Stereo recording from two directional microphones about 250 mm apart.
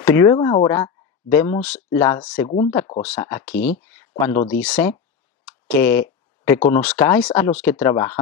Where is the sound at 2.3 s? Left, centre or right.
Left.